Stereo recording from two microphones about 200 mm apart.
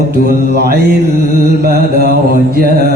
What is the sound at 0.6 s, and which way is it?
Mantra, 50° right (ahead or behind).